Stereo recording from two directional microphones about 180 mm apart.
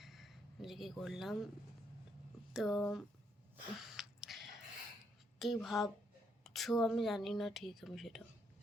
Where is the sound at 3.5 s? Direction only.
5° right (ahead or behind).